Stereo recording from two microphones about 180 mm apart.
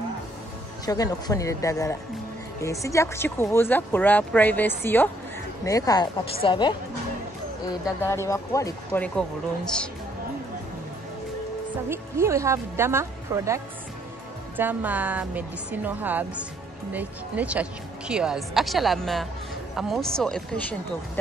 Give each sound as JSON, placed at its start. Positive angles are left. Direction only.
{"t": 0.8, "sound": "speech", "side_deg": 20}
{"t": 8.1, "sound": "speech", "side_deg": 15}
{"t": 11.9, "sound": "a woman's voice", "side_deg": -15}
{"t": 14.6, "sound": "a woman's voice", "side_deg": -10}